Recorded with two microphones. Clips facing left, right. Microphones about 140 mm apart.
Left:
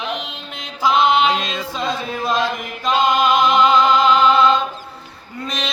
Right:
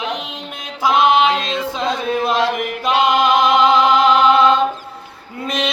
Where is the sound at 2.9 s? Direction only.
75° right (ahead or behind).